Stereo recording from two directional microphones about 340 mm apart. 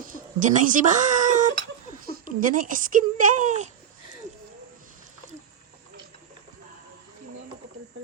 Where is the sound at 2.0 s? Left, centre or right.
Right.